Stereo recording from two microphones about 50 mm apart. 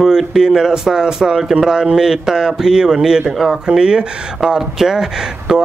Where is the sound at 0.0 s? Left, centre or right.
Centre.